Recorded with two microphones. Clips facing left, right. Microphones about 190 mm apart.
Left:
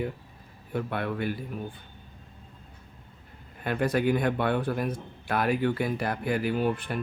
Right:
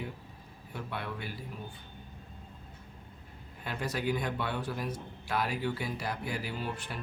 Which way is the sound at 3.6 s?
55° left (ahead or behind).